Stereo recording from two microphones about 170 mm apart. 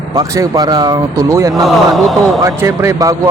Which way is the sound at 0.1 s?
20° right (ahead or behind).